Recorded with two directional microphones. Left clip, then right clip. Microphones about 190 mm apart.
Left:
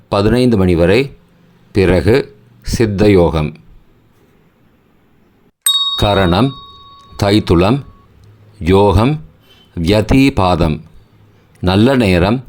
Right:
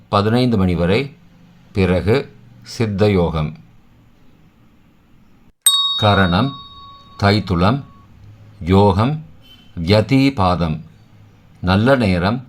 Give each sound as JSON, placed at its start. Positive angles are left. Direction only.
{"t": 0.1, "sound": "speech", "side_deg": 35}
{"t": 5.6, "sound": "a sound", "side_deg": 0}
{"t": 6.0, "sound": "speech", "side_deg": 45}